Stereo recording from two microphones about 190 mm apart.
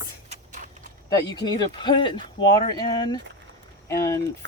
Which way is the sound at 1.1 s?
20° left (ahead or behind).